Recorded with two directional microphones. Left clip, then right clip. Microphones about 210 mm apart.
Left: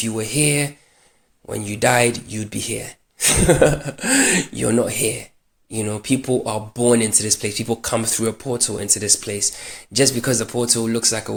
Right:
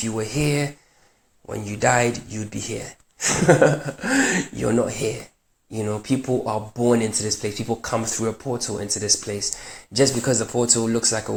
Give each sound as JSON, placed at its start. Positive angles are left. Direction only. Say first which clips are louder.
{"t": 0.0, "sound": "speech", "louder": "left 3 dB", "side_deg": 30}